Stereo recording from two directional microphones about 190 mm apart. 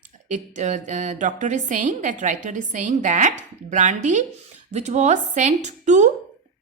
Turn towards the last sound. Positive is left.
turn(degrees=-40)  # may be behind; listen again after turning